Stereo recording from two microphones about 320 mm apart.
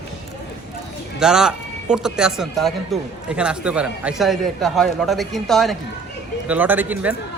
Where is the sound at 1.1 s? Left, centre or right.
Centre.